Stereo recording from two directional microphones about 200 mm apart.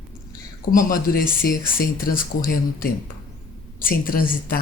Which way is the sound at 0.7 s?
45° left (ahead or behind).